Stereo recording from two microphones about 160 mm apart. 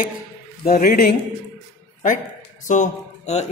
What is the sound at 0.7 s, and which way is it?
Speech, 70° left (ahead or behind).